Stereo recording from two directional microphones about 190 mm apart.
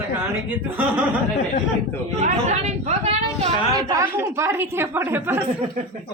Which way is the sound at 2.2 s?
35° right (ahead or behind).